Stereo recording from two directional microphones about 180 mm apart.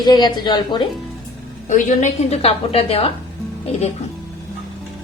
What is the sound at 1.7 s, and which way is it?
A woman's voice, 45° left (ahead or behind).